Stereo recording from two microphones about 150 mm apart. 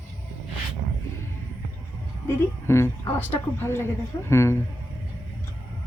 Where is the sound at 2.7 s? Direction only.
15° left (ahead or behind).